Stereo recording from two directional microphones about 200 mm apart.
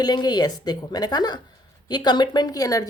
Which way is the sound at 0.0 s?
20° left (ahead or behind).